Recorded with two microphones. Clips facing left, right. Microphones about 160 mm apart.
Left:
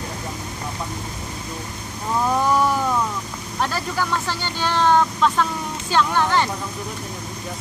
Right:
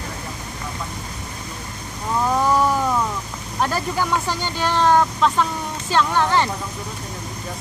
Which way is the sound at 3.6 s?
10° right (ahead or behind).